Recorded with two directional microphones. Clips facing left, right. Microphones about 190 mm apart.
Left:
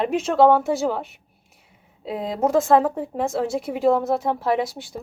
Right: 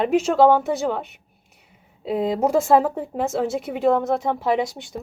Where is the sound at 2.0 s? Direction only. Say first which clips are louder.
Right 2 dB; centre (ahead or behind).